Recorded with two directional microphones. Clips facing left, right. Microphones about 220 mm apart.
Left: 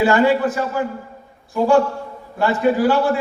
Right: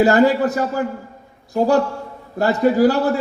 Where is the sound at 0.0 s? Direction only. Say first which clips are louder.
Right 2 dB; 40° right (ahead or behind).